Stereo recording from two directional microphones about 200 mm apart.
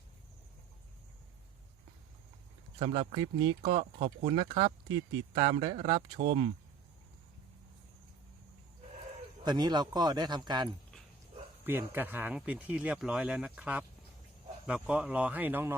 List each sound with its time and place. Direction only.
2.7 s speech: 30° right (ahead or behind)
9.4 s speech: 20° right (ahead or behind)
11.6 s speech: 10° right (ahead or behind)